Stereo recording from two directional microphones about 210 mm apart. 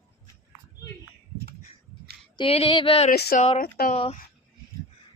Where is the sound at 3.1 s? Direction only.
45° left (ahead or behind).